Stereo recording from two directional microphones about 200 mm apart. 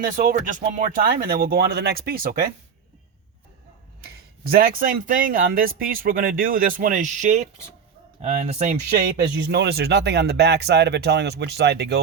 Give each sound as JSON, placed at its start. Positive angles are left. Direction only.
{"t": 0.0, "sound": "speech", "side_deg": -45}
{"t": 4.0, "sound": "speech", "side_deg": -50}
{"t": 8.9, "sound": "speech", "side_deg": -50}